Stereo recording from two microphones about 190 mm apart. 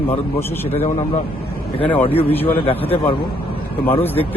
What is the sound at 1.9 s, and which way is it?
Speech, 30° left (ahead or behind).